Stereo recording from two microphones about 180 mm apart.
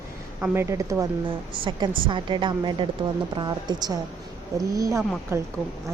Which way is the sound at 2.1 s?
25° right (ahead or behind).